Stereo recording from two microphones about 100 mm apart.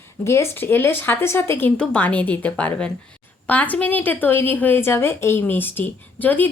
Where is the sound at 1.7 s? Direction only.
10° left (ahead or behind).